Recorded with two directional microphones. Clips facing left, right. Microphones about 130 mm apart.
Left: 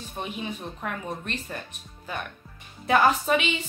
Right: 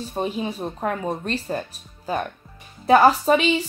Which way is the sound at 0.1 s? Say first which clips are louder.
Right 7 dB; 35° right (ahead or behind).